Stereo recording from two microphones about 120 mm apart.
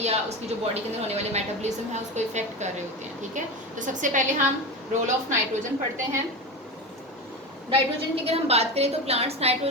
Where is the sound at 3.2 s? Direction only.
90° right.